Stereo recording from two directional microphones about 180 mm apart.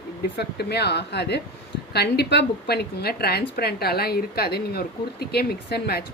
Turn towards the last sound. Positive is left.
turn(degrees=60)  # may be behind; listen again after turning